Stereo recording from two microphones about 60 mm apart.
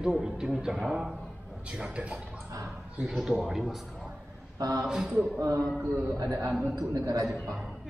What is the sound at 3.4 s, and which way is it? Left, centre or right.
Speech, centre.